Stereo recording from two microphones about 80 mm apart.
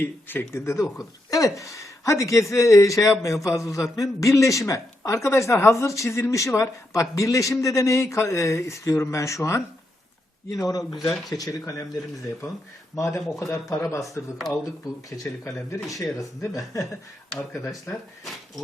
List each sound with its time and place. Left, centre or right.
0.0 s a man's voice: left
10.5 s speech: left
10.9 s speech: centre
11.3 s speech: left
13.1 s speech: centre
13.5 s a man's voice: left
15.8 s speech: centre
16.1 s speech: left